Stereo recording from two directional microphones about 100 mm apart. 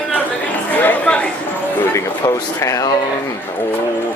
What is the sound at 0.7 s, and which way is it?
Speech, 15° left (ahead or behind).